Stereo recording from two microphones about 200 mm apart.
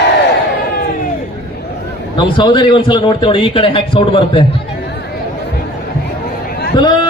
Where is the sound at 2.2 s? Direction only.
25° left (ahead or behind).